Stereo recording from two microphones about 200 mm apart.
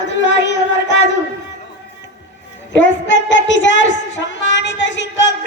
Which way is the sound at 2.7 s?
65° left (ahead or behind).